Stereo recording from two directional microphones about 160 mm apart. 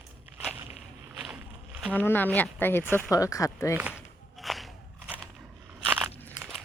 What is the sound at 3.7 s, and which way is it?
Speech, 10° right (ahead or behind).